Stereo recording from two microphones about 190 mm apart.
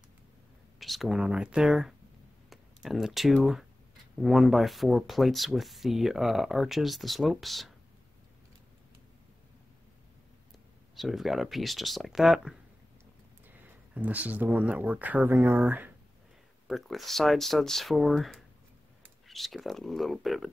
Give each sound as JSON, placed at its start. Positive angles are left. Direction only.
{"t": 0.7, "sound": "speech", "side_deg": 0}
{"t": 11.0, "sound": "speech", "side_deg": 0}
{"t": 13.9, "sound": "speech", "side_deg": -10}